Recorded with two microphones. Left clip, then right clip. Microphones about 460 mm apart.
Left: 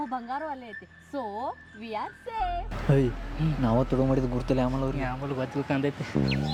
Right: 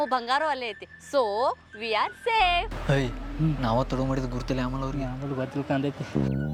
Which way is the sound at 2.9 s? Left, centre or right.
Right.